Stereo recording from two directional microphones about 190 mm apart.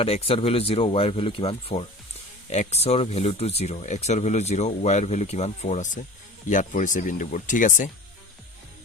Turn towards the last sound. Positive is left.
turn(degrees=45)  # may be behind; listen again after turning